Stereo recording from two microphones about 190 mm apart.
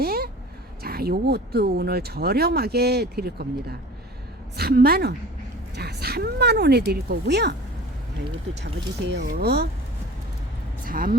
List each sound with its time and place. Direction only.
0.0 s a sound: 50° right (ahead or behind)
0.8 s speech: 55° right (ahead or behind)
9.0 s speech: 55° right (ahead or behind)
10.8 s speech: 50° right (ahead or behind)